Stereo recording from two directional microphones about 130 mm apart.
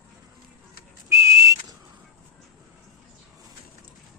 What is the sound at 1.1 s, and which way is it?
Whistle, 20° right (ahead or behind).